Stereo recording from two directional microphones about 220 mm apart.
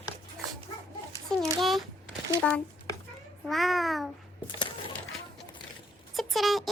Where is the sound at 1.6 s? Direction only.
Centre (ahead or behind).